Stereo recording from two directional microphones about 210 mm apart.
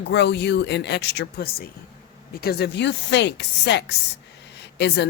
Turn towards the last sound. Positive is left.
turn(degrees=55)  # may be behind; listen again after turning